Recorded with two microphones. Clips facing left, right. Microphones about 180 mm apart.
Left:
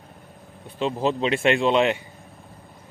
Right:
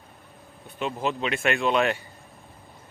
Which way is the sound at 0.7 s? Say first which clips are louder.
Left 5 dB; 30° left (ahead or behind).